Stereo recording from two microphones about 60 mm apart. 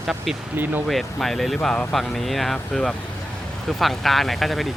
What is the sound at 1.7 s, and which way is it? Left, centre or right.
Speech, centre.